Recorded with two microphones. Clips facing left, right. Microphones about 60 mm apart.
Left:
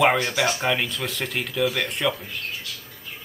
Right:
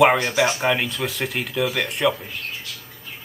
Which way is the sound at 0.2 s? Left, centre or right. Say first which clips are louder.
Right 3 dB; centre.